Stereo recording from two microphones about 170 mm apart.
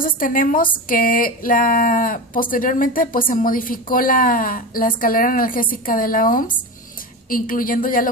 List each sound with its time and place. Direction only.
0.0 s speech: 55° left (ahead or behind)